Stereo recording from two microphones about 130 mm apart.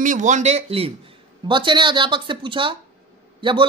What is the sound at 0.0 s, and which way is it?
Speech, 70° right (ahead or behind).